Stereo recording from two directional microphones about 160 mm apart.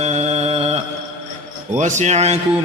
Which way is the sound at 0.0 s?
45° right (ahead or behind).